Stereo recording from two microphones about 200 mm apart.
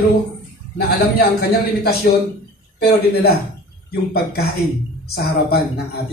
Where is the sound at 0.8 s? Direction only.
50° left (ahead or behind).